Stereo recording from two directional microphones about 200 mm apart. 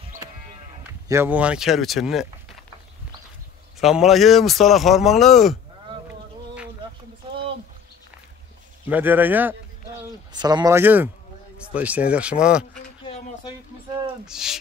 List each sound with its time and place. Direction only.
1.0 s speech: 10° right (ahead or behind)
3.8 s speech: centre (ahead or behind)
8.8 s speech: 10° right (ahead or behind)
10.3 s speech: 20° right (ahead or behind); by 12.6 s 5° right (ahead or behind)
13.0 s a sound: 30° left (ahead or behind)
14.2 s speech: 5° right (ahead or behind)